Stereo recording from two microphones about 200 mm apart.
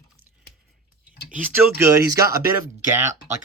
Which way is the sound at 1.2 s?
5° right (ahead or behind).